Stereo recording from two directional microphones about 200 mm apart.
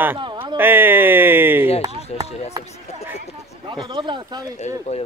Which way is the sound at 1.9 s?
30° left (ahead or behind).